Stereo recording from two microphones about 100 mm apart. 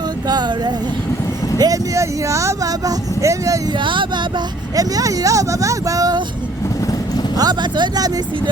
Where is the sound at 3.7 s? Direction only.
55° right (ahead or behind); by 6.2 s 35° right (ahead or behind).